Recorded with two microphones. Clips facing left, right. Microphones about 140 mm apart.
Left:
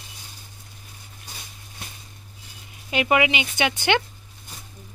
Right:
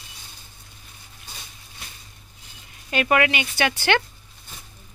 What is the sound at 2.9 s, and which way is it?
Speech, 15° left (ahead or behind).